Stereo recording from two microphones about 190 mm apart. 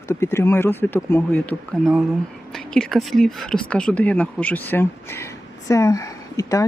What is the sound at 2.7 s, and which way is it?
Speech, centre (ahead or behind).